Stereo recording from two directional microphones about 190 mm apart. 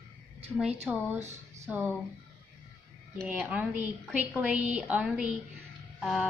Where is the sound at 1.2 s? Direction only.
35° right (ahead or behind).